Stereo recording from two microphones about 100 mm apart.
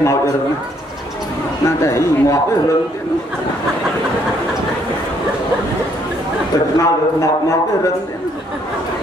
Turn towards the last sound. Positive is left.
turn(degrees=30)  # may be behind; listen again after turning